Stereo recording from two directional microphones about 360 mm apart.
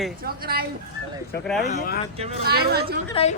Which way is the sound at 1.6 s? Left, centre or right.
Left.